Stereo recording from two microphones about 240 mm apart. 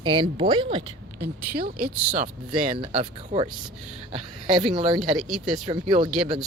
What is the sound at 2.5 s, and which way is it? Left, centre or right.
Speech, right.